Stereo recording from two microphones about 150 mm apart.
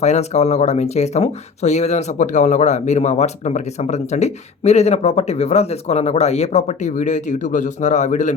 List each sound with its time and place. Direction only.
0.0 s speech: 50° left (ahead or behind)